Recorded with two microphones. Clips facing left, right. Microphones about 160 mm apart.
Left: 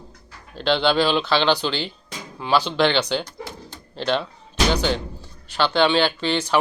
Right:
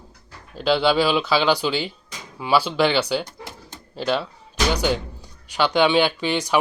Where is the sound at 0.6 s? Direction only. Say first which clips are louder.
Right 1 dB; 5° right (ahead or behind).